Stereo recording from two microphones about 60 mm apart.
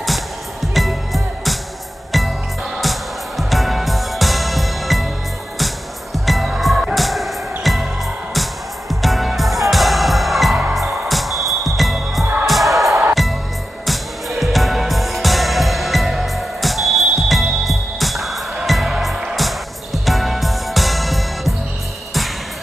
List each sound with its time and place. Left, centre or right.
0.0 s music: centre
6.1 s music: centre
9.0 s music: centre